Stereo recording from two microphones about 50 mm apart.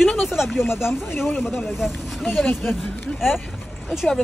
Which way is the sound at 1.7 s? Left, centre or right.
Centre.